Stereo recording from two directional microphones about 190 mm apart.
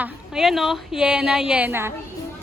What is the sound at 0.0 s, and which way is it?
A woman's voice, centre (ahead or behind).